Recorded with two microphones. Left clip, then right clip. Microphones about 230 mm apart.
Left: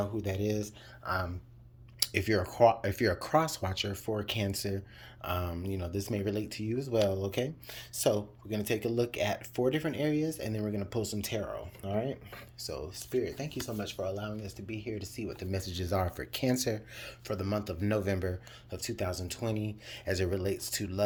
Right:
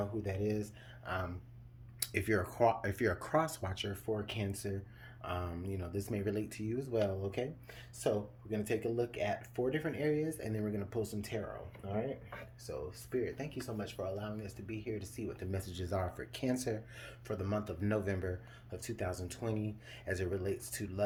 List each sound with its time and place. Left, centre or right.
0.0 s speech: left
2.0 s speech: left